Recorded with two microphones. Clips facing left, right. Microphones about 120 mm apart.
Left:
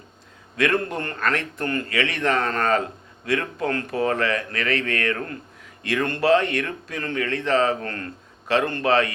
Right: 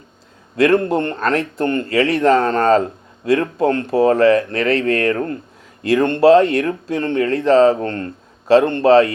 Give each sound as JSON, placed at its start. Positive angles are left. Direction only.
{"t": 0.6, "sound": "speech", "side_deg": -30}